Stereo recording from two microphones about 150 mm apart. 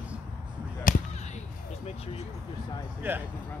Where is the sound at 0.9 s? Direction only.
65° left (ahead or behind).